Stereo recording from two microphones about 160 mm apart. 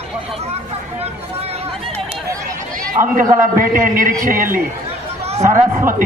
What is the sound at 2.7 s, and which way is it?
A man's voice, 55° right (ahead or behind).